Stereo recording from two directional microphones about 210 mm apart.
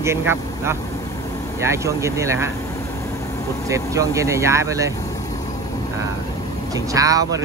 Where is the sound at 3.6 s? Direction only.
15° right (ahead or behind).